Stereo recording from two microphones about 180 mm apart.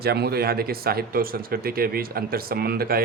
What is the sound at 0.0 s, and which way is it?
Speech, 60° right (ahead or behind).